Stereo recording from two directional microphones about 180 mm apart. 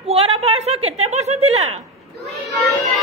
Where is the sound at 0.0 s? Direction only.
35° right (ahead or behind).